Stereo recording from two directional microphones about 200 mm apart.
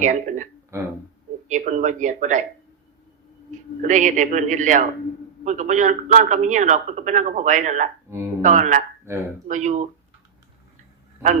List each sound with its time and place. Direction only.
0.0 s a man's voice: 40° right (ahead or behind)
0.7 s speech: 15° right (ahead or behind)
1.5 s a man's voice: 40° right (ahead or behind)
3.8 s a man's voice: 40° right (ahead or behind)
9.1 s speech: 15° right (ahead or behind)
9.5 s a man's voice: 35° right (ahead or behind)